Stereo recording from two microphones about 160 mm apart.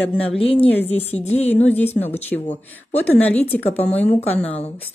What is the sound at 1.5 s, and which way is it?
A woman's voice, 10° left (ahead or behind).